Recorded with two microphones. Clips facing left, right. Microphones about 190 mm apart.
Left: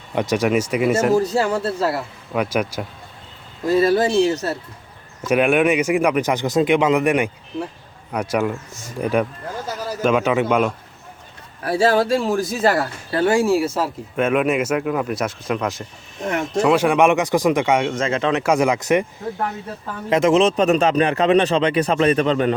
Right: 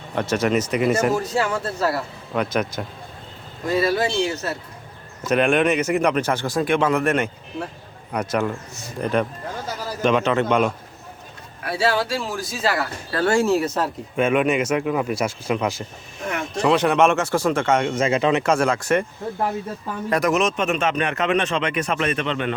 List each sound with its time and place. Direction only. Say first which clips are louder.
0.2 s speech: left 2 dB; 15° left (ahead or behind)
1.1 s a man's voice: left 4 dB; 35° left (ahead or behind)
1.6 s speech: left 2 dB; 25° left (ahead or behind)
2.3 s speech: left 2 dB; 10° left (ahead or behind)
3.7 s a man's voice: left 4 dB; 40° left (ahead or behind)
5.2 s speech: left 2 dB; 10° left (ahead or behind)
11.6 s a man's voice: left 5 dB; 40° left (ahead or behind)
13.1 s speech: left 2 dB; 20° left (ahead or behind)
17.9 s speech: right 1 dB; 10° right (ahead or behind)
18.4 s speech: left 2 dB; 15° left (ahead or behind)
20.1 s a man's voice: left 5 dB; 25° left (ahead or behind)